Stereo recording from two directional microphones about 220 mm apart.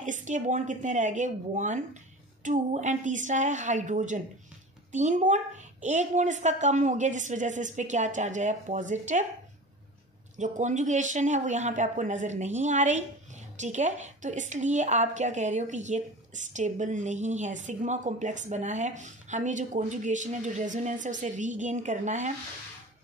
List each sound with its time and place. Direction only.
0.0 s speech: 35° right (ahead or behind)
10.3 s speech: 35° right (ahead or behind)